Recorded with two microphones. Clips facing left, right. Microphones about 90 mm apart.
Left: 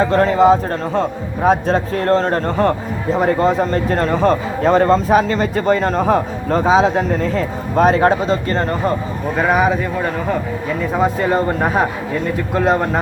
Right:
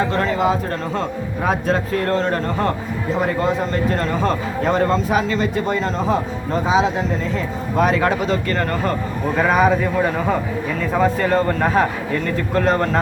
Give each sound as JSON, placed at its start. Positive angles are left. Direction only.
{"t": 0.1, "sound": "a man's voice", "side_deg": 35}
{"t": 9.4, "sound": "a man's voice", "side_deg": 5}
{"t": 10.9, "sound": "speech", "side_deg": 15}